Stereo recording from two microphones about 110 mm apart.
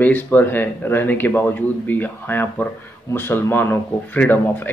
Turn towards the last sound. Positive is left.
turn(degrees=15)  # may be behind; listen again after turning